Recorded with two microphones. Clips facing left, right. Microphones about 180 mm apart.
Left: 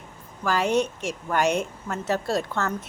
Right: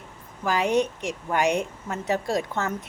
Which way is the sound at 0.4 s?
15° right (ahead or behind).